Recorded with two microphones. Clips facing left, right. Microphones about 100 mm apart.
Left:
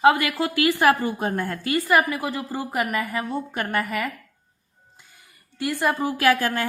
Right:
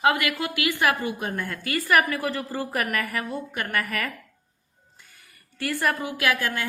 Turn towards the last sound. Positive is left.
turn(degrees=35)  # may be behind; listen again after turning